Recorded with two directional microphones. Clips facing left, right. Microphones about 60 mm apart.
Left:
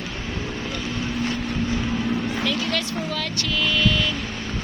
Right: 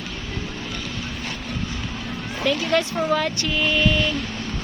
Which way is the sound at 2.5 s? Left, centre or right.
Right.